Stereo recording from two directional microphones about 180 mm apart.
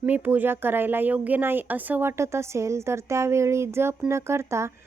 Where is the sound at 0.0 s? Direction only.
10° right (ahead or behind).